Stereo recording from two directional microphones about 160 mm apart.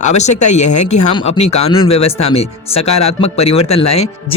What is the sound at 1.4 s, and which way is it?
Speech, 40° left (ahead or behind).